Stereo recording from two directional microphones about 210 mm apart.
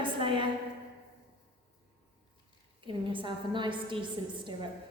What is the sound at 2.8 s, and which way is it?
A woman's voice, 25° right (ahead or behind).